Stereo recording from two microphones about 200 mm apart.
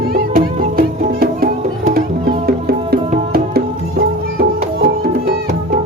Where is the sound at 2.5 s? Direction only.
50° right (ahead or behind).